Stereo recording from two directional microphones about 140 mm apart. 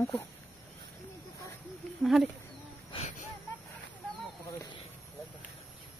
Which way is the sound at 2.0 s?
Centre (ahead or behind).